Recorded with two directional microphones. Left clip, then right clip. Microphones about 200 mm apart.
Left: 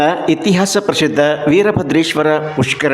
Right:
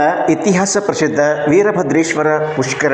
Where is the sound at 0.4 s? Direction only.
45° left (ahead or behind).